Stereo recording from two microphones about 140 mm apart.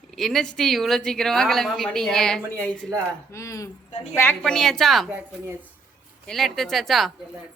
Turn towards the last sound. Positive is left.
turn(degrees=0)  # may be behind; listen again after turning